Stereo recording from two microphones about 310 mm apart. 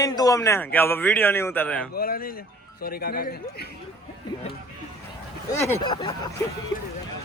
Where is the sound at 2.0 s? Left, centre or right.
Left.